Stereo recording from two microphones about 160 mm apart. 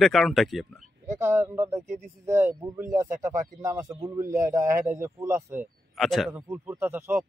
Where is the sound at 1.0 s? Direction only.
15° right (ahead or behind).